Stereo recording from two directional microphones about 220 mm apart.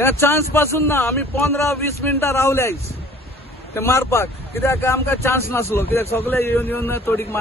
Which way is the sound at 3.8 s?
10° left (ahead or behind).